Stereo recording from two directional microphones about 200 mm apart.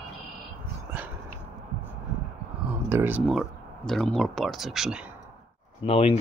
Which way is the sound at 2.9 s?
10° right (ahead or behind).